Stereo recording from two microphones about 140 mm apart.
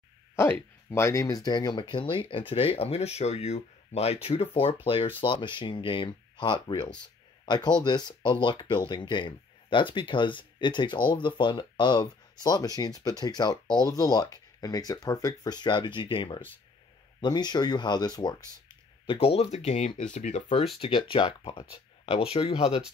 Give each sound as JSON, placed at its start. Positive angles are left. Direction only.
{"t": 0.4, "sound": "speech", "side_deg": 20}
{"t": 19.0, "sound": "speech", "side_deg": 45}
{"t": 20.4, "sound": "speech", "side_deg": 45}